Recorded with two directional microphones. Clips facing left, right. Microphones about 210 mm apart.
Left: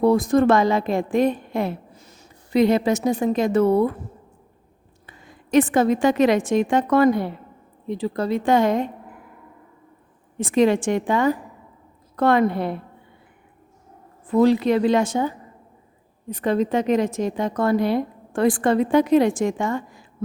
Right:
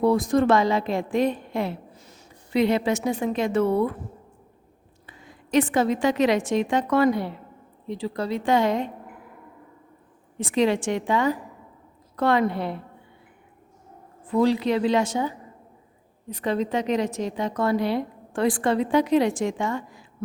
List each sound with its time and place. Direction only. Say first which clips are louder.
0.0 s a woman's voice: left 3 dB; 50° left (ahead or behind)
5.0 s a woman's voice: left 1 dB; 50° left (ahead or behind)
10.3 s a woman's voice: left 4 dB; 50° left (ahead or behind)
14.3 s a woman's voice: left 4 dB; 50° left (ahead or behind)
16.3 s a woman's voice: left 4 dB; 50° left (ahead or behind)